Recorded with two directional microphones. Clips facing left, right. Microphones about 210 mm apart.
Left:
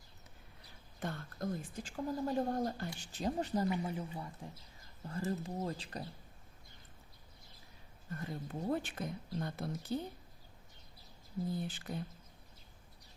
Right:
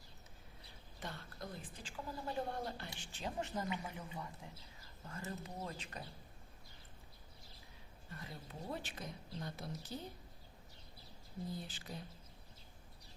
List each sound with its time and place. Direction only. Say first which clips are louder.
0.9 s a woman's voice: left 7 dB; 50° left (ahead or behind); by 6.0 s 35° left (ahead or behind)
8.1 s a woman's voice: left 9 dB; 50° left (ahead or behind)
11.7 s speech: left 6 dB; 55° left (ahead or behind)